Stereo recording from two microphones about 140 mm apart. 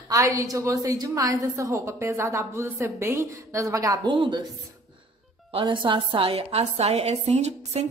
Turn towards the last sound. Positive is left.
turn(degrees=-50)  # may be behind; listen again after turning